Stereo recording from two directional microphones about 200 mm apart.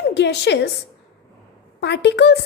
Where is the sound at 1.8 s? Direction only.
60° left (ahead or behind).